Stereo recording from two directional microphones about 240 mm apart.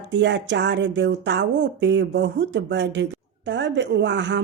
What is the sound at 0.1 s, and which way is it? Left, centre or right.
Speech, right.